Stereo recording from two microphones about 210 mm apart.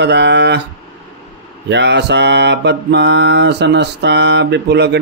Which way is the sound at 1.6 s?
55° right (ahead or behind).